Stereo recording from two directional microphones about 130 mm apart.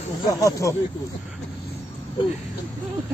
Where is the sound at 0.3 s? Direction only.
25° left (ahead or behind).